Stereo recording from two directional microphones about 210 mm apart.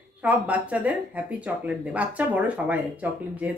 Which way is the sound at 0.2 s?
5° right (ahead or behind).